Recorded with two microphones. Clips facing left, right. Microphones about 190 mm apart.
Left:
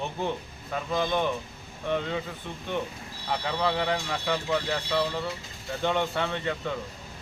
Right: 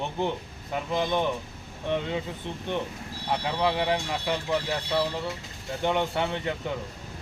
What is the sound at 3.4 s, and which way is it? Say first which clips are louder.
Speech: right 1 dB; 15° right (ahead or behind).